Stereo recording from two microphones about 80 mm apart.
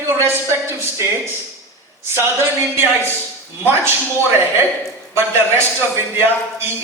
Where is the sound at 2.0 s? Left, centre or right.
Right.